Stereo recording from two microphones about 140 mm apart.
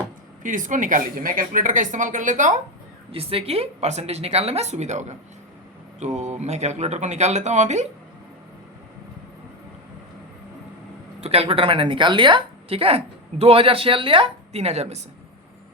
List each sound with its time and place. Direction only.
0.4 s speech: 70° right (ahead or behind)
3.1 s speech: 40° right (ahead or behind)
11.2 s a woman's voice: 45° right (ahead or behind)